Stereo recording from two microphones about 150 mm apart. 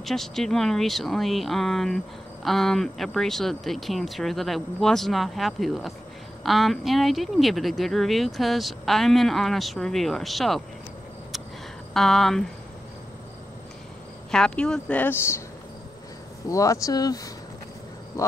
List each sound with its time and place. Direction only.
0.0 s speech: centre (ahead or behind)
11.9 s speech: centre (ahead or behind)
14.3 s speech: 5° left (ahead or behind)
16.4 s speech: 20° left (ahead or behind)